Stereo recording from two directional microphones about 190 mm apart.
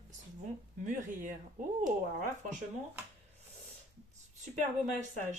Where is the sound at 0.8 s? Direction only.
40° right (ahead or behind).